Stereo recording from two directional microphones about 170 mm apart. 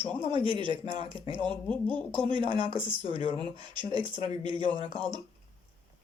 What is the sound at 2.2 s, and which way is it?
Speech, 30° right (ahead or behind).